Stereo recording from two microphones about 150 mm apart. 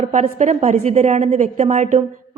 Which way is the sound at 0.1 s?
50° right (ahead or behind).